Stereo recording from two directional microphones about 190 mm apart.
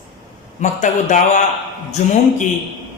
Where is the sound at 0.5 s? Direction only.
40° left (ahead or behind).